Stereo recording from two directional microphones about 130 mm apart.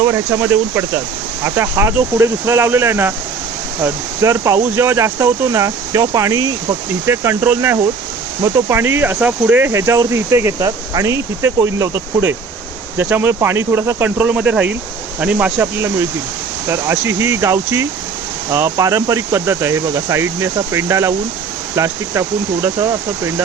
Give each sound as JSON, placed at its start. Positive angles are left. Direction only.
{"t": 0.0, "sound": "speech", "side_deg": -20}